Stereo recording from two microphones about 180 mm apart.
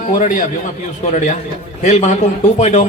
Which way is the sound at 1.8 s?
40° left (ahead or behind).